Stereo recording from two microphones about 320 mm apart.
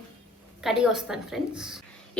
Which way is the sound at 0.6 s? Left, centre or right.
Centre.